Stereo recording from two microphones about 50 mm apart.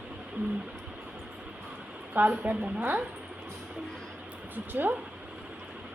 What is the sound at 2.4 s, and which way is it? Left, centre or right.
Speech, right.